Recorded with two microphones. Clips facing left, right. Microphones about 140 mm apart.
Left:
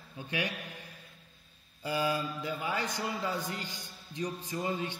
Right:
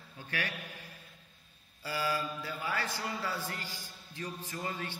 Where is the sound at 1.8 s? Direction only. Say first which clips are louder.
Left 3 dB; 20° left (ahead or behind).